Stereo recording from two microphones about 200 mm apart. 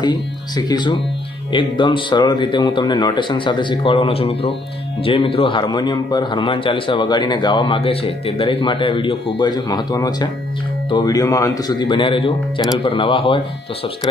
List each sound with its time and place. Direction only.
0.0 s a man's voice: 20° left (ahead or behind)